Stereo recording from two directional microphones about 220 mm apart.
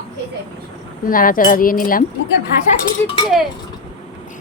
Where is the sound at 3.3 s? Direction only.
Centre (ahead or behind).